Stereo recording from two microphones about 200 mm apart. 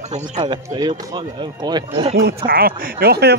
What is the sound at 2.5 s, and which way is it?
Speech, 50° right (ahead or behind).